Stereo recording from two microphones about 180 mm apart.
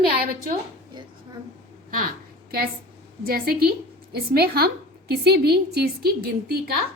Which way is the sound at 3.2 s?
55° right (ahead or behind).